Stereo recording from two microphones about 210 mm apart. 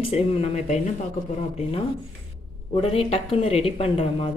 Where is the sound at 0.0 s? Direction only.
30° left (ahead or behind).